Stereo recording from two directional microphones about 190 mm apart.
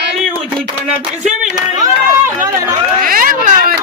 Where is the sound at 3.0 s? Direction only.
50° right (ahead or behind).